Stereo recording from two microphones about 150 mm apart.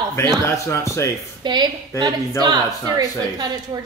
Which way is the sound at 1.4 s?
30° right (ahead or behind).